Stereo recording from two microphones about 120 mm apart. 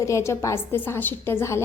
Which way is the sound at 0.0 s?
25° left (ahead or behind).